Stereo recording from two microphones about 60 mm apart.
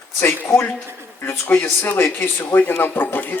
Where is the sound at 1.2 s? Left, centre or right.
Left.